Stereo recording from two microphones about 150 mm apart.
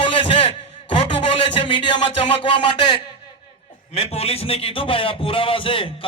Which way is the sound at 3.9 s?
45° left (ahead or behind).